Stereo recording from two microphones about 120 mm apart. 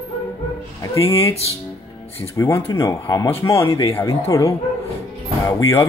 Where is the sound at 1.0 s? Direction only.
55° left (ahead or behind).